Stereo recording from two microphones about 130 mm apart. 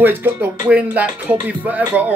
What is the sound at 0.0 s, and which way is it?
Music, 15° right (ahead or behind).